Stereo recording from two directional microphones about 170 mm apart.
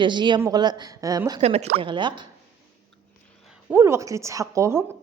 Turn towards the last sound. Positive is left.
turn(degrees=-15)  # may be behind; listen again after turning